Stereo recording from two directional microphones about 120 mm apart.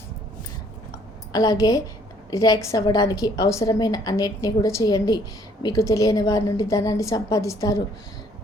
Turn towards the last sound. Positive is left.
turn(degrees=25)  # may be behind; listen again after turning